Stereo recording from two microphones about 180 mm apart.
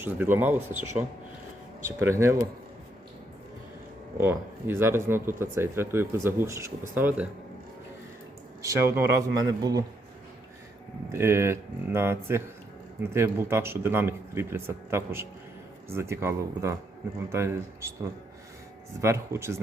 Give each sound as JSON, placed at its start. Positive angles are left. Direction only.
{"t": 0.0, "sound": "speech", "side_deg": -10}
{"t": 2.0, "sound": "speech", "side_deg": -15}
{"t": 4.2, "sound": "speech", "side_deg": -10}
{"t": 8.6, "sound": "speech", "side_deg": -15}
{"t": 11.1, "sound": "speech", "side_deg": -15}
{"t": 19.0, "sound": "speech", "side_deg": -15}